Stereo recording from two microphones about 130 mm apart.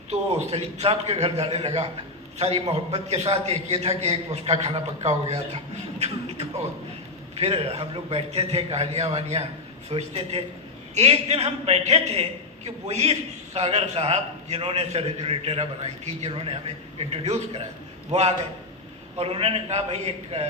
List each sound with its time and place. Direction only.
0.1 s a man's voice: 50° right (ahead or behind)
6.0 s beatboxing: 55° right (ahead or behind)
7.3 s a man's voice: 50° right (ahead or behind)